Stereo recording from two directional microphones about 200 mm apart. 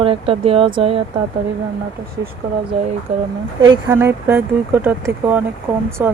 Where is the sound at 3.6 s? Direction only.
20° right (ahead or behind).